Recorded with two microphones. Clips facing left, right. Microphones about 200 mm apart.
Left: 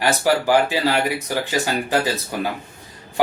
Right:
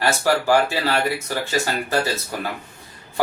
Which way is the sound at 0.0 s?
15° left (ahead or behind).